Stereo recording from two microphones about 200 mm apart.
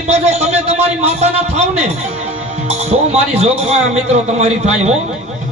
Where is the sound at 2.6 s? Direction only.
30° right (ahead or behind).